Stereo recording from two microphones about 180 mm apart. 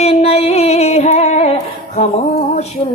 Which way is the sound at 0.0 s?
35° left (ahead or behind).